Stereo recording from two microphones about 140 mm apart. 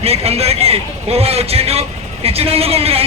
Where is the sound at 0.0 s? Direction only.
45° right (ahead or behind).